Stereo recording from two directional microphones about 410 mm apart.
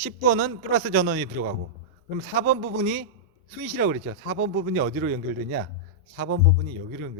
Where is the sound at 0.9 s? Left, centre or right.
Right.